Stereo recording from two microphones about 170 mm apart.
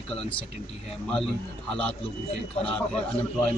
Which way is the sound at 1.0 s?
5° left (ahead or behind).